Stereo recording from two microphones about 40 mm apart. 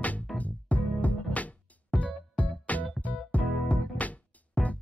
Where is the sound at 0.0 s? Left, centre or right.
Left.